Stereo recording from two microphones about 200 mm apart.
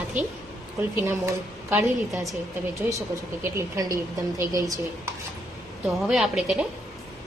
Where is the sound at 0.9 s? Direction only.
15° right (ahead or behind).